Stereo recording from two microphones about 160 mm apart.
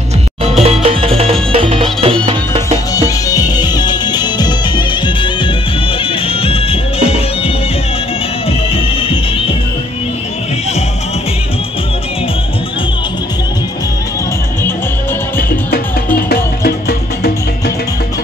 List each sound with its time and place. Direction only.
0.4 s music: 40° right (ahead or behind)
3.3 s music: 25° left (ahead or behind)
8.5 s music: 40° left (ahead or behind)
16.2 s music: 75° left (ahead or behind)